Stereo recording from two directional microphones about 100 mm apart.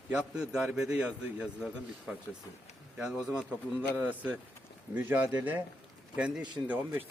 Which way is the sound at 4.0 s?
15° right (ahead or behind).